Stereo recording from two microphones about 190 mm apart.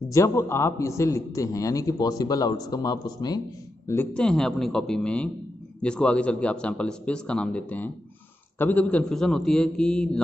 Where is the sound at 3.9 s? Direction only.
10° left (ahead or behind).